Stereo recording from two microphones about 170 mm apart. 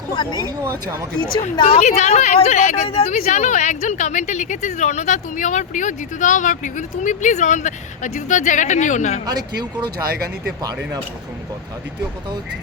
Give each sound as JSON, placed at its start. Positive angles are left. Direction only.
{"t": 0.1, "sound": "speech", "side_deg": 25}
{"t": 0.3, "sound": "speech", "side_deg": -20}
{"t": 1.8, "sound": "a woman's voice", "side_deg": 40}
{"t": 9.2, "sound": "speech", "side_deg": -25}
{"t": 10.1, "sound": "speech", "side_deg": -65}